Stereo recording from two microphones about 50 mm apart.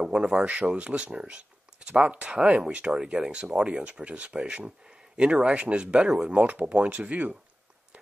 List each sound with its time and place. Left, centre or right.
0.0 s speech: centre
0.7 s speech: right